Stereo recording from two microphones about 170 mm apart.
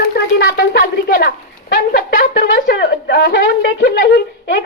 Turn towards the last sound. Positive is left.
turn(degrees=75)  # may be behind; listen again after turning